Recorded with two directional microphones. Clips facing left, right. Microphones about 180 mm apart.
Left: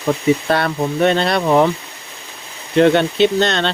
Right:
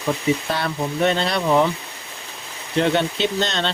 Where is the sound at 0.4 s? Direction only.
60° left (ahead or behind).